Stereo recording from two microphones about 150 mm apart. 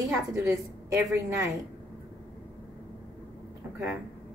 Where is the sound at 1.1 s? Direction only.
20° right (ahead or behind).